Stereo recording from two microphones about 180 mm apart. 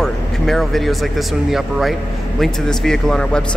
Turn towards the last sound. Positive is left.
turn(degrees=5)  # may be behind; listen again after turning